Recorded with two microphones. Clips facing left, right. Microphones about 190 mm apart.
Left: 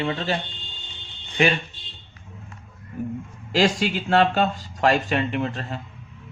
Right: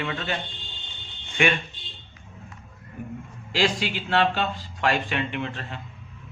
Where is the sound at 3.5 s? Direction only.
40° left (ahead or behind).